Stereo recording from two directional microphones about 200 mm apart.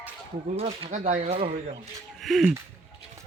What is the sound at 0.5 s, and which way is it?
Speech, 30° right (ahead or behind).